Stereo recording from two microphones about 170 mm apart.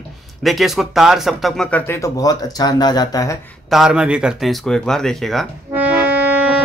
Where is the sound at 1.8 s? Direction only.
15° left (ahead or behind).